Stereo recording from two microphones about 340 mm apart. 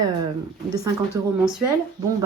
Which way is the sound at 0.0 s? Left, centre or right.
Centre.